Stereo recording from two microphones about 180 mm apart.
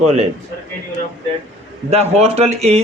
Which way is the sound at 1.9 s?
35° right (ahead or behind).